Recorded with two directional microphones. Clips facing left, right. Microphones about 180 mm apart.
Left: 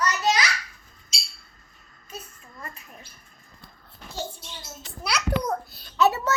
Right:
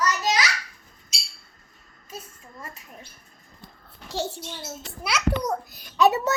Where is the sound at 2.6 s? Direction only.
20° right (ahead or behind).